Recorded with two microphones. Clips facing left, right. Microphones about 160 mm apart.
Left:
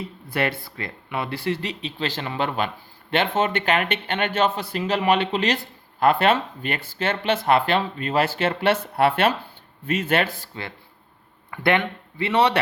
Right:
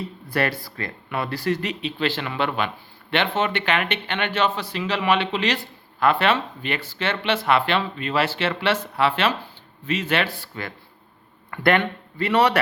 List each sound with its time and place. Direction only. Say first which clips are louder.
0.3 s a man's voice: right 1 dB; 20° left (ahead or behind); by 10.4 s 50° left (ahead or behind)
12.1 s speech: right 1 dB; 25° left (ahead or behind)